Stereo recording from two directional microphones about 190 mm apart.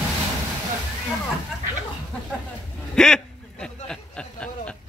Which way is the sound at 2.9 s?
5° left (ahead or behind).